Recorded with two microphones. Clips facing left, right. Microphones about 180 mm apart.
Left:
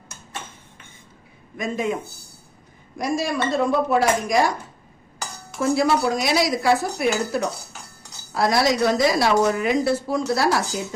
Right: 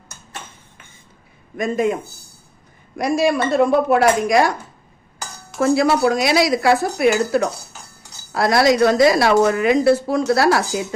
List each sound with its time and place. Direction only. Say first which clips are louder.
1.5 s speech: right 6 dB; 50° right (ahead or behind)
3.0 s a woman's voice: right 6 dB; 65° right (ahead or behind)
5.5 s a woman's voice: right 4 dB; 70° right (ahead or behind)